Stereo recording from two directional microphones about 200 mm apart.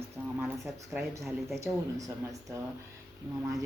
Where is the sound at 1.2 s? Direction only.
Centre (ahead or behind).